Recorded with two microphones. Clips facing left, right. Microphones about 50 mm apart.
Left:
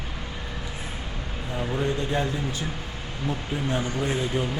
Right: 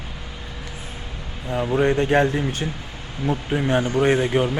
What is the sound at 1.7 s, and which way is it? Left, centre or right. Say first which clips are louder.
Speech: right 9 dB; right.